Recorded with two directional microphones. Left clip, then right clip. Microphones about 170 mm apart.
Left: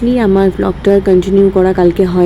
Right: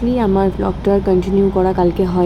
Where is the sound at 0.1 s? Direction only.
15° left (ahead or behind).